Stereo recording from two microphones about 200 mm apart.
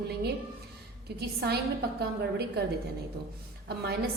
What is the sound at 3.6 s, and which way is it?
Speech, 55° right (ahead or behind).